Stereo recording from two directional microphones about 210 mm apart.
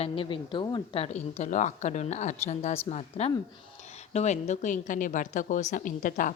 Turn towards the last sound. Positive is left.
turn(degrees=40)  # may be behind; listen again after turning